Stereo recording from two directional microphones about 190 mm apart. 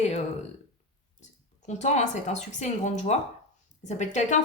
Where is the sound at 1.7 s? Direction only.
35° left (ahead or behind).